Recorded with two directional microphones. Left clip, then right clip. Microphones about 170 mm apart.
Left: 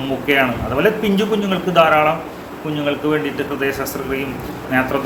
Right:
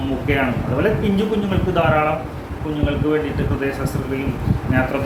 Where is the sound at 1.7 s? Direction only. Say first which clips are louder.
Left 5 dB; 20° left (ahead or behind).